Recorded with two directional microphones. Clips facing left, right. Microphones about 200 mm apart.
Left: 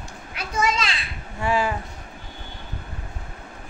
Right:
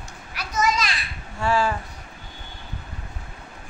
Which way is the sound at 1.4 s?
20° left (ahead or behind).